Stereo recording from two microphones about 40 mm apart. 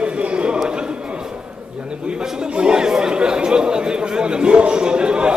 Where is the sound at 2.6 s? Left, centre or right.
Centre.